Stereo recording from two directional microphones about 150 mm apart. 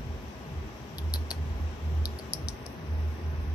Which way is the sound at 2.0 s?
25° left (ahead or behind).